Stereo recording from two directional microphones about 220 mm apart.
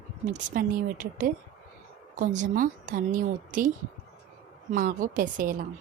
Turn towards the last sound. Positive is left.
turn(degrees=-40)  # may be behind; listen again after turning